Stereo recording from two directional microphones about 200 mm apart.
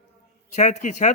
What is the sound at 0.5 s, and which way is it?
Speech, 35° left (ahead or behind).